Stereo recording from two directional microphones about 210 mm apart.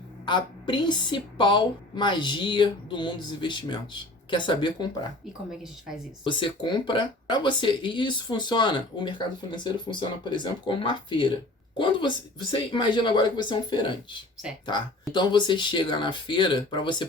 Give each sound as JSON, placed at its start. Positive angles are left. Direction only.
{"t": 0.3, "sound": "speech", "side_deg": 20}
{"t": 6.2, "sound": "speech", "side_deg": 20}